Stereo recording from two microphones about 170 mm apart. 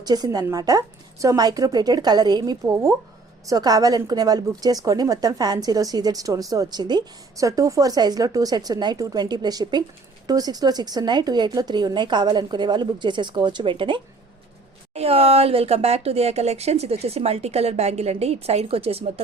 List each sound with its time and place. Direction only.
0.0 s a woman's voice: 25° right (ahead or behind)